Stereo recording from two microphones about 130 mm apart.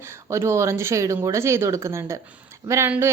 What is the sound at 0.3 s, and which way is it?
A woman's voice, 20° right (ahead or behind).